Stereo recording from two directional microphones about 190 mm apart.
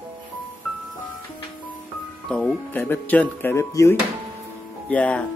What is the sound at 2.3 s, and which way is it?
Speech, 5° left (ahead or behind).